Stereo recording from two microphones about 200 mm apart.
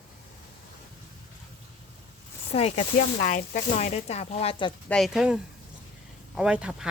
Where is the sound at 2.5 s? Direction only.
30° left (ahead or behind).